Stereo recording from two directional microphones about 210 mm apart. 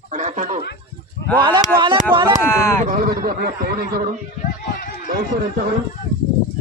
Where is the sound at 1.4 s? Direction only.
20° right (ahead or behind).